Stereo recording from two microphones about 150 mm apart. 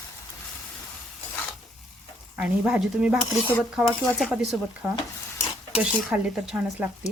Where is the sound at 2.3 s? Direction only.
5° right (ahead or behind).